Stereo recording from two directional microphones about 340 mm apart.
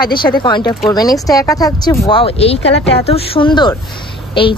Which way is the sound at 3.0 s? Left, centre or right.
Centre.